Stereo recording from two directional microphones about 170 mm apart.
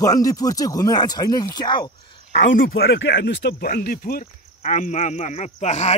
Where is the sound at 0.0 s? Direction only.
20° left (ahead or behind).